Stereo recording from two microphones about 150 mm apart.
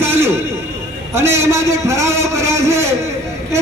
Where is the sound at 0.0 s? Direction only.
15° right (ahead or behind).